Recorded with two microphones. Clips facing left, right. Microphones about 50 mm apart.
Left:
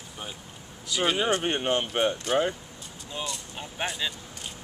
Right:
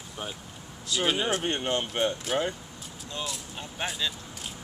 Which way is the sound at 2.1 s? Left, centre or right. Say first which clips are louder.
Left 3 dB; centre.